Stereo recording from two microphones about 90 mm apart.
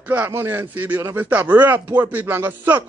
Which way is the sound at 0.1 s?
20° right (ahead or behind).